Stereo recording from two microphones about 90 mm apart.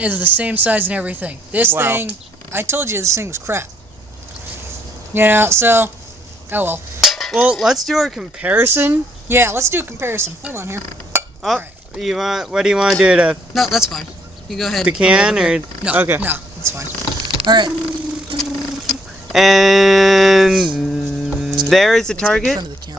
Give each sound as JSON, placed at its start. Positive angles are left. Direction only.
{"t": 0.0, "sound": "a woman's voice", "side_deg": -20}
{"t": 5.1, "sound": "a woman's voice", "side_deg": -25}
{"t": 7.0, "sound": "a sound", "side_deg": 0}
{"t": 7.5, "sound": "speech", "side_deg": -5}
{"t": 8.4, "sound": "a woman's voice", "side_deg": -20}
{"t": 11.4, "sound": "speech", "side_deg": 0}
{"t": 13.5, "sound": "speech", "side_deg": 0}
{"t": 14.8, "sound": "speech", "side_deg": -10}
{"t": 17.4, "sound": "speech", "side_deg": -55}
{"t": 18.3, "sound": "a sound", "side_deg": -65}
{"t": 18.9, "sound": "speech", "side_deg": 0}
{"t": 20.7, "sound": "hum", "side_deg": 0}
{"t": 21.7, "sound": "speech", "side_deg": 0}